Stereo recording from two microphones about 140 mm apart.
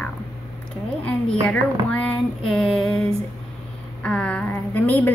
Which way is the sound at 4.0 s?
10° left (ahead or behind).